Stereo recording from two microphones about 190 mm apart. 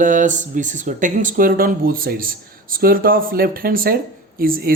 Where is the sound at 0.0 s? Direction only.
40° right (ahead or behind).